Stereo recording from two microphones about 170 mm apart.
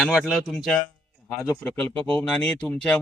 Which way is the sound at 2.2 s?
5° left (ahead or behind).